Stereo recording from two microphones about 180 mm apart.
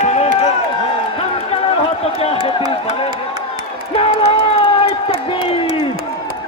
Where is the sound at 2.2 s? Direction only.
30° left (ahead or behind).